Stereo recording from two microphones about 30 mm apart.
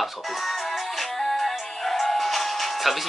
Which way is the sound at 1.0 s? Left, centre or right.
Centre.